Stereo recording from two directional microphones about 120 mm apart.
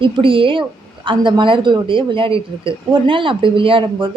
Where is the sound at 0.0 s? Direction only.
45° right (ahead or behind).